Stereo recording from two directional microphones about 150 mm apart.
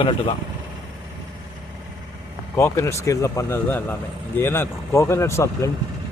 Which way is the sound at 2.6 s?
15° left (ahead or behind).